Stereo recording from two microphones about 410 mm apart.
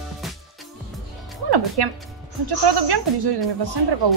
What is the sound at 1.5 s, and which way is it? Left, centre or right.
Speech, right.